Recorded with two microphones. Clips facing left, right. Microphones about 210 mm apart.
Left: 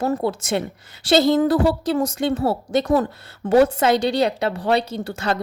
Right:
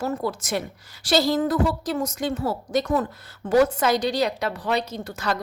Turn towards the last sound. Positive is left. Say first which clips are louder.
# left 4 dB
turn(degrees=25)  # may be behind; listen again after turning